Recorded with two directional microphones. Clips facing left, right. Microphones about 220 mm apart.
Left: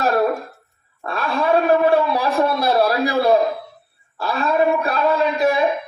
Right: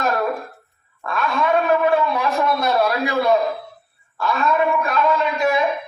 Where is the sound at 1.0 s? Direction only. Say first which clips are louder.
Left 1 dB; 35° left (ahead or behind).